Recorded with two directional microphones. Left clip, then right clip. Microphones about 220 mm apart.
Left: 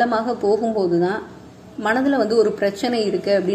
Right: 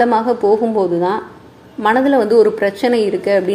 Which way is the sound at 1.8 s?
15° right (ahead or behind).